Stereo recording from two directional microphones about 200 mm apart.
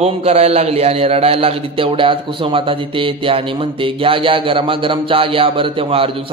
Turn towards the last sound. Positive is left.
turn(degrees=-25)  # may be behind; listen again after turning